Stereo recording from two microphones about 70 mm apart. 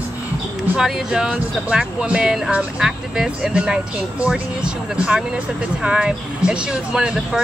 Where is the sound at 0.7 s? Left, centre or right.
Centre.